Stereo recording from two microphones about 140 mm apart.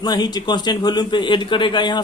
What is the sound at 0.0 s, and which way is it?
A man's voice, 30° left (ahead or behind).